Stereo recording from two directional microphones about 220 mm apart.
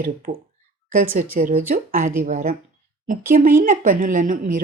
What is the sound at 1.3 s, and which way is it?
A woman's voice, 40° right (ahead or behind).